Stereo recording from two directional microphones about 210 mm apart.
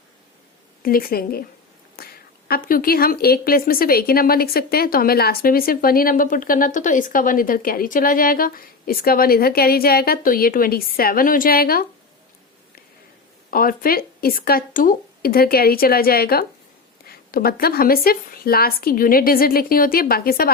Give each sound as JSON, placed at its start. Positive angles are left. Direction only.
{"t": 0.8, "sound": "a woman's voice", "side_deg": 45}
{"t": 2.0, "sound": "a sound", "side_deg": 45}
{"t": 2.5, "sound": "a woman's voice", "side_deg": 45}
{"t": 13.5, "sound": "a woman's voice", "side_deg": 45}